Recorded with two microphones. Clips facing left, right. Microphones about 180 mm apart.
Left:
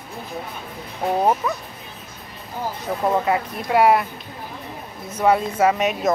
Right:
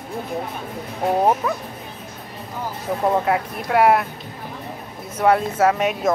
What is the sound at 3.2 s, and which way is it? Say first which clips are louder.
Speech: even; 5° left (ahead or behind).